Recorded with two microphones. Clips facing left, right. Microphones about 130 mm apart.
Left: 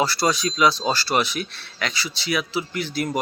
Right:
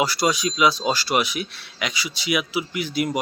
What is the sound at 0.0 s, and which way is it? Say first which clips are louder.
Speech: even; 15° right (ahead or behind).